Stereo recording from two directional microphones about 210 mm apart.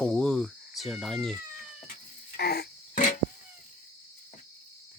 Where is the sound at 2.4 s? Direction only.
50° left (ahead or behind).